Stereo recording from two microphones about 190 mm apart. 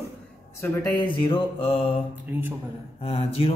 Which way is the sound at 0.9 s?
25° left (ahead or behind).